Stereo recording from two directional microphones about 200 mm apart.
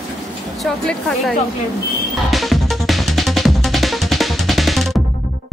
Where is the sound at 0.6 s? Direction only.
Centre (ahead or behind).